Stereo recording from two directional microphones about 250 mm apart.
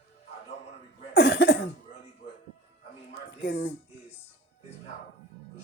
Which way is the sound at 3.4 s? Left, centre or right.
Left.